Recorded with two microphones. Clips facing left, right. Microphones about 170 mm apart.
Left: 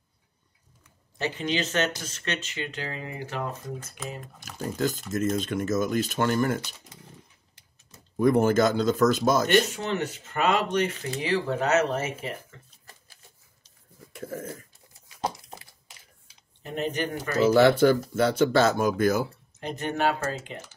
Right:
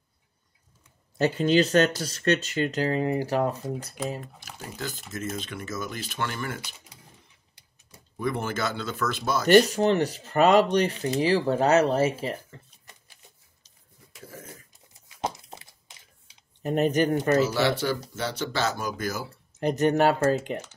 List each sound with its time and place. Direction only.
1.1 s speech: 40° right (ahead or behind)
4.4 s speech: 45° left (ahead or behind)
8.2 s speech: 45° left (ahead or behind)
9.5 s speech: 40° right (ahead or behind)
14.1 s a sound: 50° left (ahead or behind)
15.0 s a sound: 20° right (ahead or behind)
16.6 s speech: 45° right (ahead or behind)
17.4 s speech: 55° left (ahead or behind)
19.6 s speech: 40° right (ahead or behind)